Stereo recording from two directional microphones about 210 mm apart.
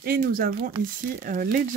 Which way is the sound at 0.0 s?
45° right (ahead or behind).